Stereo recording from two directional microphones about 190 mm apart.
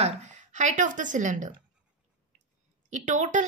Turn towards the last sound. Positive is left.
turn(degrees=-40)  # may be behind; listen again after turning